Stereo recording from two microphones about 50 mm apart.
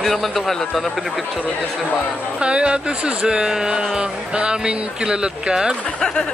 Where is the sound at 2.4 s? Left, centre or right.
Right.